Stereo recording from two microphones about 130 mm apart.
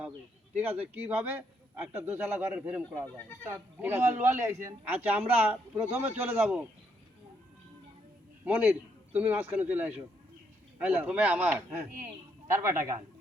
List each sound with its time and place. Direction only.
0.5 s a man's voice: 15° right (ahead or behind)
8.4 s a man's voice: 10° right (ahead or behind)